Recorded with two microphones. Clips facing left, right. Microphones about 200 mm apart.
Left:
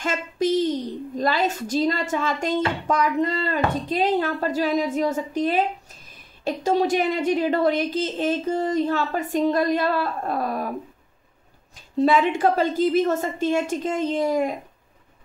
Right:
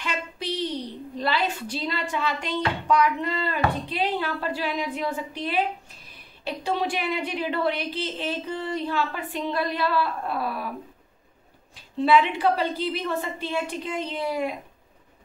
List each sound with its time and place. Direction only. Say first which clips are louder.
0.0 s a woman's voice: left 8 dB; 45° left (ahead or behind)
11.7 s a woman's voice: left 1 dB; 45° left (ahead or behind)